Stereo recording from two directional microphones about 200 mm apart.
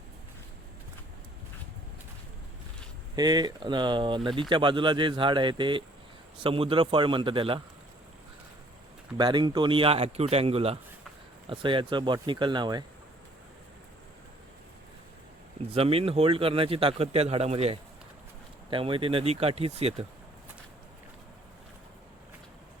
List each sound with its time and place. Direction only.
3.2 s speech: 20° right (ahead or behind)
9.1 s speech: 20° right (ahead or behind)
15.7 s speech: 30° right (ahead or behind)